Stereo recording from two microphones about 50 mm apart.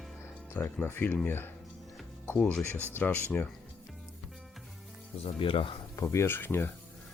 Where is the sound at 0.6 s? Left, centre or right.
Left.